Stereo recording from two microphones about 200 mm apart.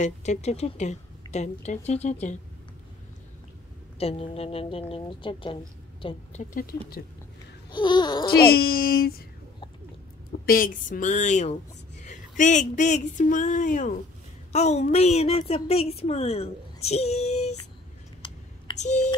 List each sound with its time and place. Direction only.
0.0 s a woman's voice: 35° left (ahead or behind)
4.0 s a woman's voice: 30° left (ahead or behind)
6.0 s a woman's voice: 40° left (ahead or behind)
7.7 s babbling: 20° left (ahead or behind)
8.3 s a woman's voice: 50° left (ahead or behind)
10.4 s a woman's voice: 45° left (ahead or behind)
18.2 s a sound: 25° left (ahead or behind)
18.8 s a sound: 35° left (ahead or behind)